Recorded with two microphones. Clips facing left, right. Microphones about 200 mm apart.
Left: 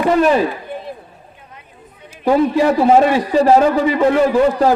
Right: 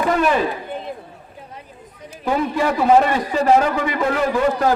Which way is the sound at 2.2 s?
35° left (ahead or behind).